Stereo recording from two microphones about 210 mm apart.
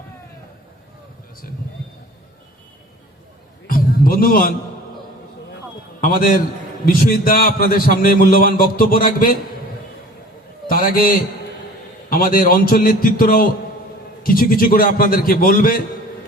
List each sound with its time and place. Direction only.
3.7 s music: 45° left (ahead or behind)
6.0 s a man's voice: 40° left (ahead or behind)
10.7 s a man's voice: 45° left (ahead or behind)
12.1 s a man's voice: 40° left (ahead or behind)